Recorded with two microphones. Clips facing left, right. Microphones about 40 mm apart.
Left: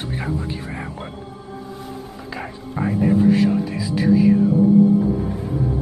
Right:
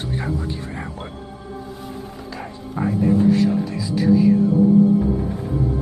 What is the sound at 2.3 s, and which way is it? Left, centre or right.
Speech, centre.